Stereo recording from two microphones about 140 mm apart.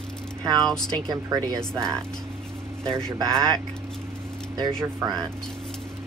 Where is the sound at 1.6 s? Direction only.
5° left (ahead or behind).